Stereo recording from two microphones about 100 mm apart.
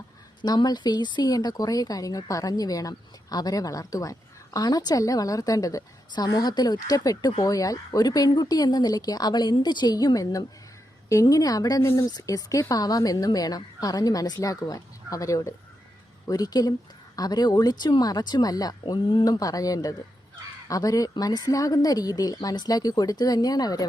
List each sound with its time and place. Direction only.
0.4 s speech: 40° left (ahead or behind)
11.8 s speech: 25° left (ahead or behind)
12.1 s speech: 35° left (ahead or behind)